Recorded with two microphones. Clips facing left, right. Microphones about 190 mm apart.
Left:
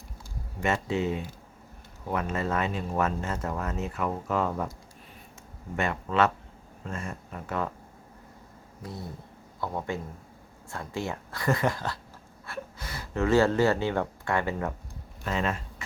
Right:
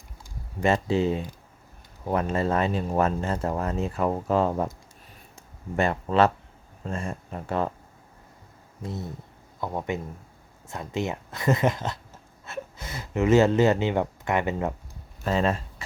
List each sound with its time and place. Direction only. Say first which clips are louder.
0.6 s speech: right 5 dB; 30° right (ahead or behind)
5.7 s speech: right 4 dB; 35° right (ahead or behind)
8.8 s speech: right 4 dB; 25° right (ahead or behind)
15.2 s speech: right 5 dB; 35° right (ahead or behind)